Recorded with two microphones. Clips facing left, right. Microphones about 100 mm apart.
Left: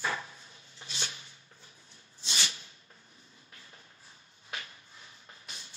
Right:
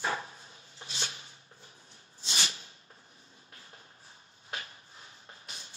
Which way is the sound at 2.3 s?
35° right (ahead or behind).